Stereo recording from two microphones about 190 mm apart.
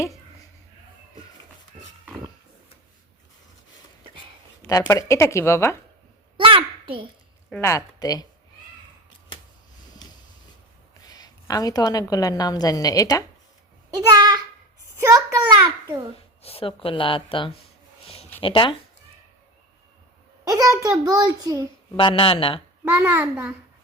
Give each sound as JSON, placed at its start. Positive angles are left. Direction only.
{"t": 4.6, "sound": "speech", "side_deg": 20}
{"t": 6.3, "sound": "a sound", "side_deg": -25}
{"t": 7.5, "sound": "speech", "side_deg": 15}
{"t": 11.1, "sound": "a woman's voice", "side_deg": 20}
{"t": 14.1, "sound": "a sound", "side_deg": -20}
{"t": 16.4, "sound": "speech", "side_deg": 30}
{"t": 20.5, "sound": "a child's voice", "side_deg": -20}
{"t": 21.9, "sound": "speech", "side_deg": 25}
{"t": 22.8, "sound": "a child's voice", "side_deg": -10}